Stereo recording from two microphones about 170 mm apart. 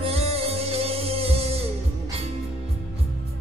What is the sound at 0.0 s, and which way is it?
Music, 35° right (ahead or behind).